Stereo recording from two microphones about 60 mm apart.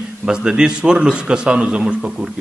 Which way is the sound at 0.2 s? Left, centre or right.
Centre.